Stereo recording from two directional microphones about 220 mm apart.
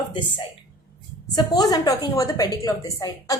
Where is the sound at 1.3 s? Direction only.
15° left (ahead or behind).